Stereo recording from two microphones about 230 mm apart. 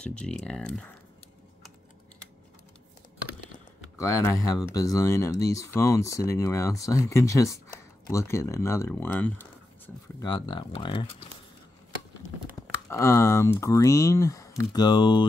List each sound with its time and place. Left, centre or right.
0.0 s speech: centre
4.0 s speech: centre
10.2 s speech: centre
12.9 s speech: centre